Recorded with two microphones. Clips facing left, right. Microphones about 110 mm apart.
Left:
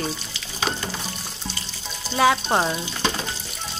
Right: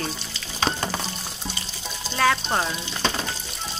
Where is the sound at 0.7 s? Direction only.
10° left (ahead or behind).